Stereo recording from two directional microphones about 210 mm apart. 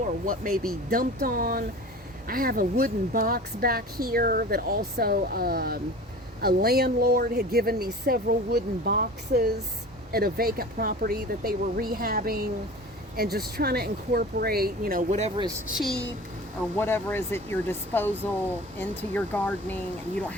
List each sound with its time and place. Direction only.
0.3 s speech: 45° right (ahead or behind)
15.4 s speech: 15° right (ahead or behind)
15.7 s a woman's voice: centre (ahead or behind)
16.7 s speech: 10° left (ahead or behind)